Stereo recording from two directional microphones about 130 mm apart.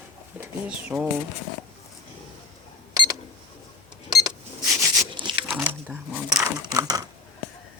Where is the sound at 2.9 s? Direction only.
30° right (ahead or behind).